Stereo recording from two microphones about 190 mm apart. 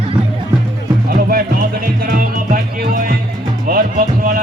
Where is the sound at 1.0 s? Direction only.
50° right (ahead or behind).